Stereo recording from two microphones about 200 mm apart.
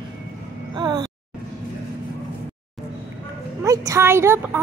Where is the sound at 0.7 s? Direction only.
20° right (ahead or behind).